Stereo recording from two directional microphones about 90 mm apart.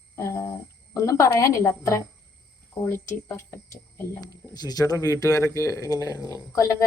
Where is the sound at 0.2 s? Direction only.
30° left (ahead or behind).